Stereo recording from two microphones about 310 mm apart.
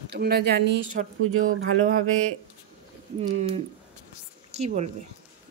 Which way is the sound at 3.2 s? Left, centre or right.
Right.